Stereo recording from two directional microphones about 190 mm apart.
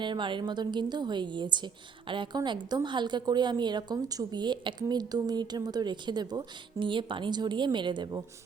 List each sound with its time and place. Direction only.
0.0 s a woman's voice: 25° right (ahead or behind)